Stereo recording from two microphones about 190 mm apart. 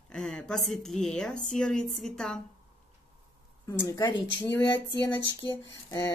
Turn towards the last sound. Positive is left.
turn(degrees=20)  # may be behind; listen again after turning